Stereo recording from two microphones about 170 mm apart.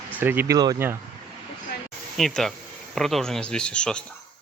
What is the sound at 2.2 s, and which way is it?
Speech, centre (ahead or behind).